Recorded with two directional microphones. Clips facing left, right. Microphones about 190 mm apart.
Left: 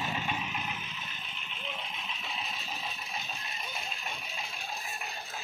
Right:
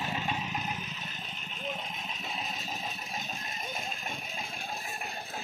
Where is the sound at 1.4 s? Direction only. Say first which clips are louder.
Right 4 dB; 45° right (ahead or behind).